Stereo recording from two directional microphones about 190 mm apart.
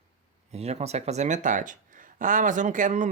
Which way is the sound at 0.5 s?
35° right (ahead or behind).